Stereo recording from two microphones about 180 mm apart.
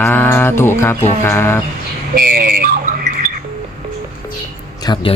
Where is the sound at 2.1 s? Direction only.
55° right (ahead or behind).